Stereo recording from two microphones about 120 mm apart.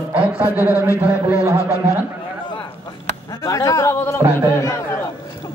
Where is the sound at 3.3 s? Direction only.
30° left (ahead or behind).